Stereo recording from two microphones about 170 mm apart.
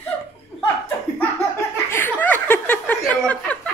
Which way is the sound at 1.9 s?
10° left (ahead or behind).